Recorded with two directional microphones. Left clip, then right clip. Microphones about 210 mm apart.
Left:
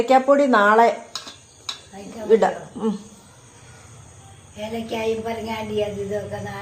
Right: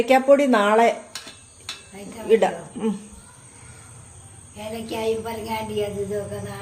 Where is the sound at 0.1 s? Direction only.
Centre (ahead or behind).